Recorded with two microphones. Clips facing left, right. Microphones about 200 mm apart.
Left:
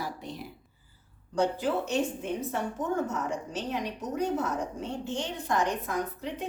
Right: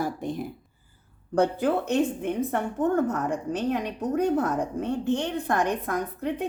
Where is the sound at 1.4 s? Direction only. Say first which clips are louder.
Right 4 dB; 55° right (ahead or behind).